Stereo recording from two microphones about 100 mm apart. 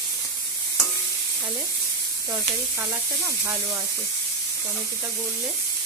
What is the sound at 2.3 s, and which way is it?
Sizzle, 20° right (ahead or behind).